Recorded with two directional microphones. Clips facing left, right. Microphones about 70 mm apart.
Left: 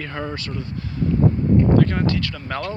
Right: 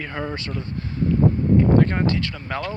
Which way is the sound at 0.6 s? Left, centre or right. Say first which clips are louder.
Even; right.